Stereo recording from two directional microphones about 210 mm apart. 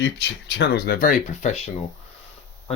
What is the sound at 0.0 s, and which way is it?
Speech, 55° left (ahead or behind).